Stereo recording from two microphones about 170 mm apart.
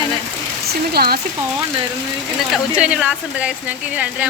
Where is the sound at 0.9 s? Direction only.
65° right (ahead or behind).